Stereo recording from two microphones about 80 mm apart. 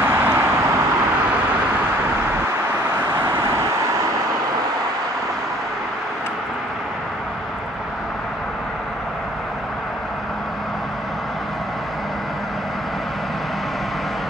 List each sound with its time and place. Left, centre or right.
0.0 s vehicle: right
3.2 s vehicle: right